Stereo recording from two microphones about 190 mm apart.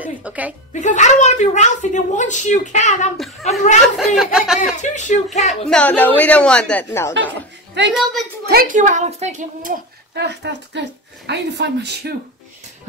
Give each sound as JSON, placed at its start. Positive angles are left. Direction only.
{"t": 0.0, "sound": "music", "side_deg": -5}
{"t": 0.7, "sound": "a woman's voice", "side_deg": 40}
{"t": 3.8, "sound": "speech", "side_deg": 0}
{"t": 4.7, "sound": "a woman's voice", "side_deg": 40}
{"t": 5.7, "sound": "a woman's voice", "side_deg": 5}
{"t": 8.0, "sound": "speech", "side_deg": 0}
{"t": 8.5, "sound": "a child's voice", "side_deg": -50}
{"t": 10.1, "sound": "speech", "side_deg": -65}